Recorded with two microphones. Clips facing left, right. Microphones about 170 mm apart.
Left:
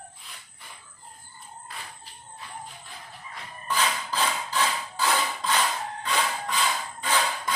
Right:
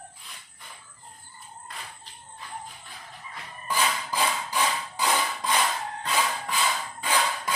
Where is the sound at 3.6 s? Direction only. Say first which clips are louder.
Even; 10° right (ahead or behind).